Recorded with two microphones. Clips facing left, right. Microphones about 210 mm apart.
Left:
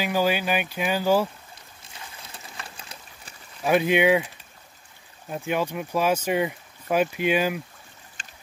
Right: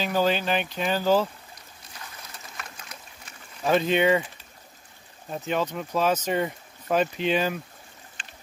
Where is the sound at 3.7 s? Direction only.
10° left (ahead or behind).